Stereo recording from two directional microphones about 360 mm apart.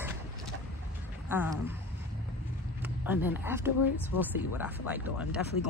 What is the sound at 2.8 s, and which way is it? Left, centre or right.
Speech, centre.